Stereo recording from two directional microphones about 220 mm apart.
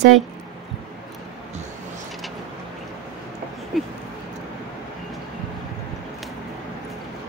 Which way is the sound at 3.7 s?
Centre (ahead or behind).